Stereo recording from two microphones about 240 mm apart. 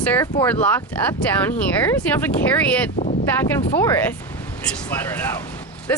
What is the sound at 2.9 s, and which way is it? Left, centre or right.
Speech, left.